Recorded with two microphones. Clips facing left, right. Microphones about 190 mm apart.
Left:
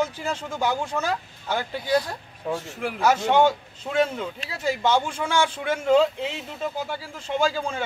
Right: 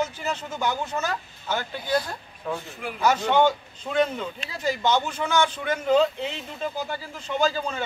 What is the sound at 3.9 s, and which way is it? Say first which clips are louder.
A man's voice: even; 10° left (ahead or behind).